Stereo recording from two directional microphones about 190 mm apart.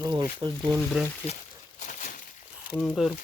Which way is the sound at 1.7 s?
40° left (ahead or behind).